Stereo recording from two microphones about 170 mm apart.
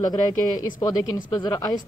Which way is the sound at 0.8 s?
25° left (ahead or behind).